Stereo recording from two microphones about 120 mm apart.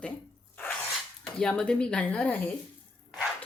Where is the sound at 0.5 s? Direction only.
15° left (ahead or behind).